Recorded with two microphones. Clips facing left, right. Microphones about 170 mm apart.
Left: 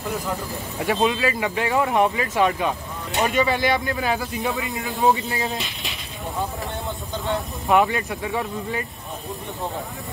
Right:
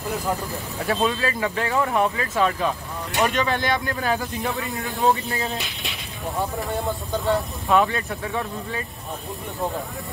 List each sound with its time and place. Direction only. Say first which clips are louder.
0.7 s speech: left 2 dB; 15° left (ahead or behind); by 4.9 s centre (ahead or behind)
5.0 s speech: left 1 dB; 15° left (ahead or behind)
7.6 s speech: left 2 dB; 15° left (ahead or behind)